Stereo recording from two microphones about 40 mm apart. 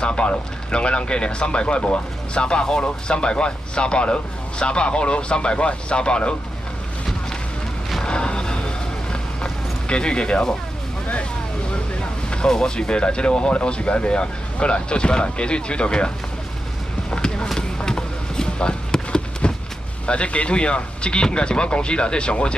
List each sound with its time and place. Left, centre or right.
0.0 s speech: left
8.0 s vehicle: left
12.0 s speech: left
17.1 s a sound: left
20.1 s speech: left